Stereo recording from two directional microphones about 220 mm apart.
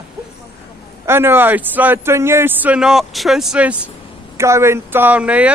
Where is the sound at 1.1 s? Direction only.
10° right (ahead or behind).